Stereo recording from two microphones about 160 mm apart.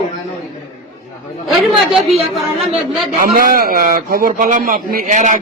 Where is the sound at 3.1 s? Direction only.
55° right (ahead or behind).